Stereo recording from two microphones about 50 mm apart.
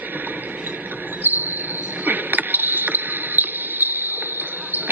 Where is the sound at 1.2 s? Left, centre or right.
Right.